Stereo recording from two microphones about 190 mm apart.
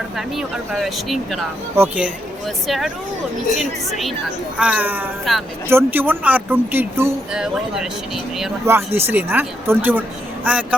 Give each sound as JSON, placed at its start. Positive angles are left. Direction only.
{"t": 0.2, "sound": "speech", "side_deg": 0}
{"t": 1.7, "sound": "speech", "side_deg": -15}
{"t": 2.6, "sound": "speech", "side_deg": 0}
{"t": 4.5, "sound": "speech", "side_deg": -5}
{"t": 5.3, "sound": "speech", "side_deg": 0}
{"t": 5.6, "sound": "speech", "side_deg": -10}